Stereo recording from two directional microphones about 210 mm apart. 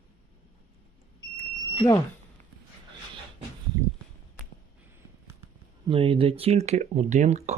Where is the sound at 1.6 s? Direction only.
20° left (ahead or behind).